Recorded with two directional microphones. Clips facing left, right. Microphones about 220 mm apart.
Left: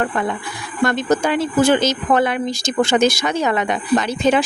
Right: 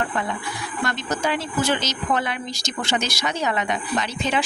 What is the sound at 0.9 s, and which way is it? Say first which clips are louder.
Speech: left 8 dB; 50° left (ahead or behind).